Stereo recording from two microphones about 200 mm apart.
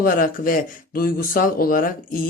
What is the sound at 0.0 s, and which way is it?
Speech, 45° left (ahead or behind).